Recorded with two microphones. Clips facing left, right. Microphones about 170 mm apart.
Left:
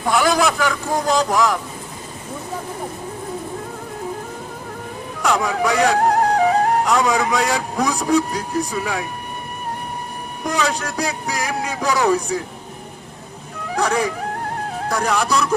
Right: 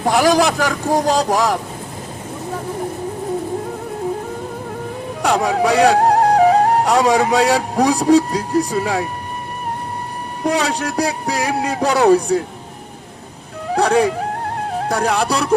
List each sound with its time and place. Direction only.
0.0 s speech: 35° right (ahead or behind)
5.2 s speech: 35° right (ahead or behind)
10.6 s speech: 30° right (ahead or behind)
13.7 s speech: 30° right (ahead or behind)